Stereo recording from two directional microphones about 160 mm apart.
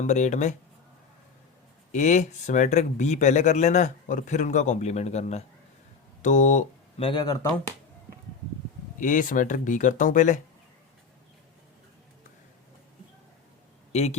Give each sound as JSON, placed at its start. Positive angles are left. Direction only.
{"t": 0.0, "sound": "speech", "side_deg": 50}
{"t": 1.9, "sound": "speech", "side_deg": 50}
{"t": 7.0, "sound": "speech", "side_deg": 30}
{"t": 9.0, "sound": "speech", "side_deg": 55}
{"t": 13.9, "sound": "a man's voice", "side_deg": 45}